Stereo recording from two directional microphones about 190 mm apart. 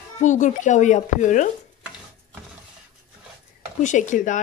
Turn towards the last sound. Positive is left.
turn(degrees=40)  # may be behind; listen again after turning